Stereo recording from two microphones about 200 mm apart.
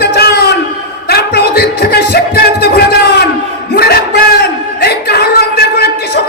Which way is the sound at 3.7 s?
50° left (ahead or behind).